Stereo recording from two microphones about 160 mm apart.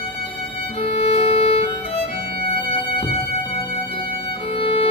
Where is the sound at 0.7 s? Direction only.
40° left (ahead or behind).